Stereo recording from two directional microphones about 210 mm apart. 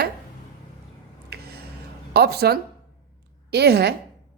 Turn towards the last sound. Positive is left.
turn(degrees=-50)  # may be behind; listen again after turning